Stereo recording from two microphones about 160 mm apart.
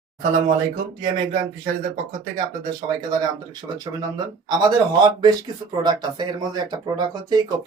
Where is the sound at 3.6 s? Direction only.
25° right (ahead or behind).